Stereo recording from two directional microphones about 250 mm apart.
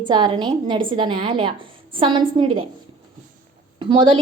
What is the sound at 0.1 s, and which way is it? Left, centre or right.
A woman's voice, centre.